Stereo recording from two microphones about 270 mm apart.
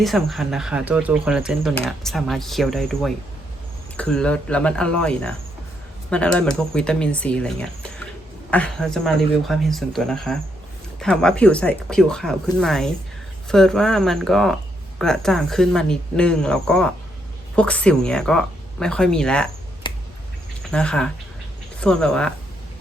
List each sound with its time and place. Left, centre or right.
0.0 s speech: centre
19.9 s bird: centre
20.7 s speech: centre